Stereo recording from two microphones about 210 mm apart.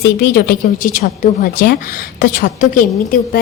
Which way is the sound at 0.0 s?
50° left (ahead or behind).